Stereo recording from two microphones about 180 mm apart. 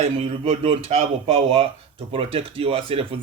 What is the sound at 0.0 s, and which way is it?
Speech, 30° right (ahead or behind).